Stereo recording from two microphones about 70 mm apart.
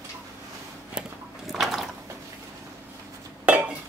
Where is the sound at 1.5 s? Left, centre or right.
Centre.